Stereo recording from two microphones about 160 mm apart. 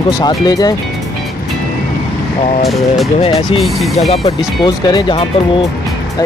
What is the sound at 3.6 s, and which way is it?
Speech, centre (ahead or behind).